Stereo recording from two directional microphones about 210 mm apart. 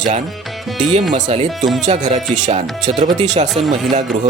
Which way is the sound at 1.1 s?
30° right (ahead or behind).